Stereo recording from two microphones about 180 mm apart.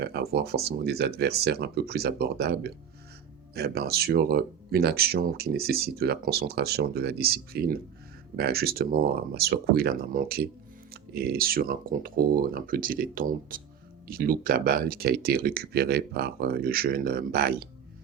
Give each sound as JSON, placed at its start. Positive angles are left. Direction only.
{"t": 0.0, "sound": "speech", "side_deg": -60}